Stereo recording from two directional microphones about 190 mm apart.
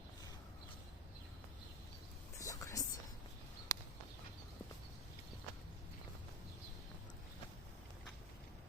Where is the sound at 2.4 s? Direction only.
15° left (ahead or behind).